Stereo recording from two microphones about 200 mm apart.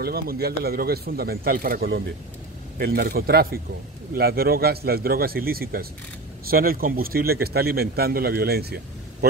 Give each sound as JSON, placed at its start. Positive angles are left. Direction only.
{"t": 0.0, "sound": "a man's voice", "side_deg": -50}